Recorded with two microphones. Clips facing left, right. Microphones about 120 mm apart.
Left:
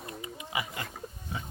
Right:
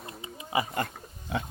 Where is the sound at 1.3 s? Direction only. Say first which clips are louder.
Right 8 dB; 70° right (ahead or behind).